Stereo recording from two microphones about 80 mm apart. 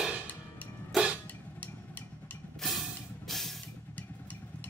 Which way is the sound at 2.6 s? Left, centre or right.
Centre.